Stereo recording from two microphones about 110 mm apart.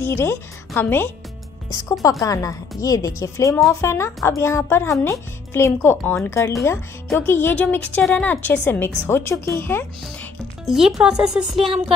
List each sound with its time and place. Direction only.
0.0 s a woman's voice: 25° left (ahead or behind)
1.7 s a woman's voice: 35° left (ahead or behind)
10.6 s speech: centre (ahead or behind)